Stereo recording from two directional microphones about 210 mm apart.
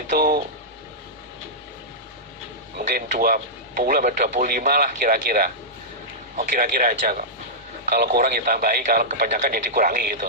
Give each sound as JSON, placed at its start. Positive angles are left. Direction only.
{"t": 0.1, "sound": "speech", "side_deg": -45}
{"t": 2.7, "sound": "a man's voice", "side_deg": -45}